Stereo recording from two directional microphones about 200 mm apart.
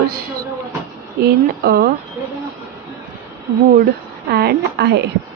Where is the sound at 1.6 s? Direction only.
50° right (ahead or behind).